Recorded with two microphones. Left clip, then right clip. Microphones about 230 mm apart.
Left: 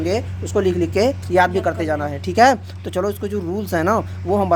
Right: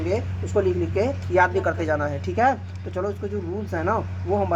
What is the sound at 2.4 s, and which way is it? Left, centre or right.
Speech, left.